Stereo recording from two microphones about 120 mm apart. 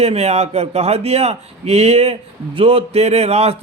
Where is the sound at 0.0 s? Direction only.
60° right (ahead or behind).